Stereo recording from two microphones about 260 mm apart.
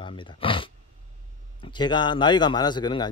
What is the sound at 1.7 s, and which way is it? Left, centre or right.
Speech, centre.